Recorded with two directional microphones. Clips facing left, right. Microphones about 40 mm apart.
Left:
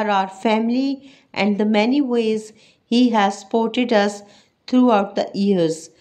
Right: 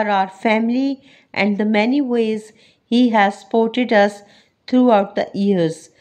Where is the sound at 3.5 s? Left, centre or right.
Centre.